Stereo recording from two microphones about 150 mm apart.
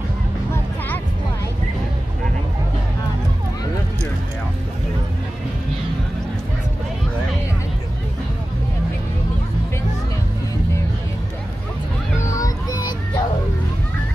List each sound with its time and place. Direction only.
12.3 s child singing: 20° left (ahead or behind)